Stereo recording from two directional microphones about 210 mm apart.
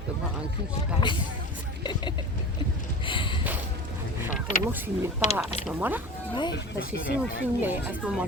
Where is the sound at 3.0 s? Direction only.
25° left (ahead or behind).